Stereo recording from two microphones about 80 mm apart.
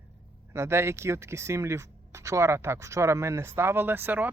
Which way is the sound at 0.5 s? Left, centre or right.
Right.